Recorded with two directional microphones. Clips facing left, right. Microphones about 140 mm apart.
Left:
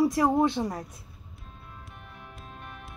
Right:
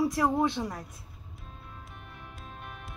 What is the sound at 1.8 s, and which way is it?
Music, centre (ahead or behind).